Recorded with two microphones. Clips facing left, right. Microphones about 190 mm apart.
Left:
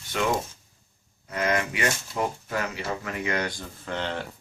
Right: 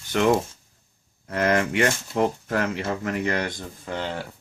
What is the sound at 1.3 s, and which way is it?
Speech, 55° right (ahead or behind).